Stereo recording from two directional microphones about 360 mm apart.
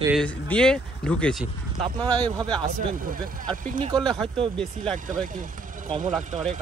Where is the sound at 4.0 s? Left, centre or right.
Centre.